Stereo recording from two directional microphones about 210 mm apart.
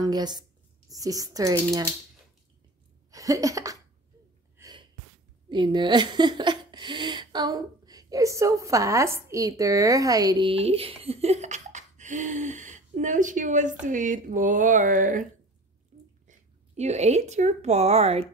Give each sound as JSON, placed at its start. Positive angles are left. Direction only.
{"t": 0.0, "sound": "speech", "side_deg": -20}
{"t": 3.1, "sound": "a sound", "side_deg": -15}
{"t": 4.6, "sound": "gasp", "side_deg": -20}
{"t": 5.5, "sound": "a woman's voice", "side_deg": -20}
{"t": 15.9, "sound": "a sound", "side_deg": -35}
{"t": 16.3, "sound": "speech", "side_deg": -30}